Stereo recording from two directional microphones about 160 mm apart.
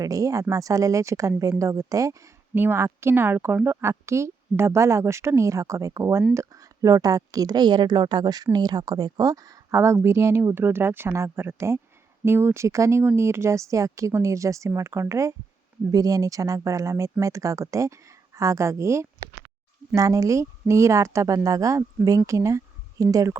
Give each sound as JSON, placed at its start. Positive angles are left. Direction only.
{"t": 0.0, "sound": "speech", "side_deg": -20}